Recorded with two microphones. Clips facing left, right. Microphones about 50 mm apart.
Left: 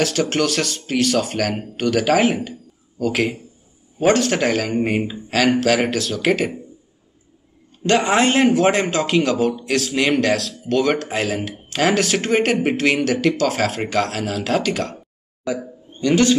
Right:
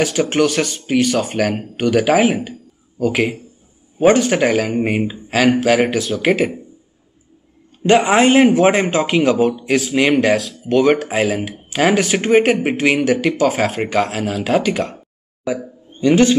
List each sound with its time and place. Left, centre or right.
0.0 s speech: centre
7.8 s a man's voice: centre